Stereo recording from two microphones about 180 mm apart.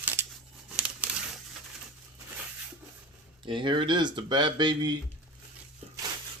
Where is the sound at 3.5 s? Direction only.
25° right (ahead or behind).